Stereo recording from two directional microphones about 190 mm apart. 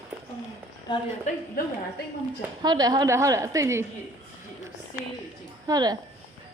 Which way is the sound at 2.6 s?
20° right (ahead or behind).